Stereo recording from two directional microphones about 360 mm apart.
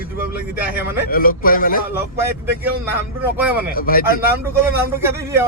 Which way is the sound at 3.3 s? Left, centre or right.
Centre.